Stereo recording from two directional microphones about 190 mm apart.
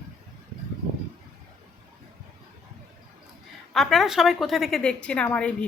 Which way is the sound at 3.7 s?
Centre (ahead or behind).